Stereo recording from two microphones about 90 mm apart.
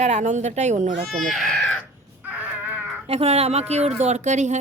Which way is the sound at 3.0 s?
90° right.